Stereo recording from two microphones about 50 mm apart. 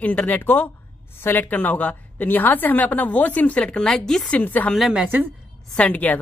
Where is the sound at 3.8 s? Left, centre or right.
Centre.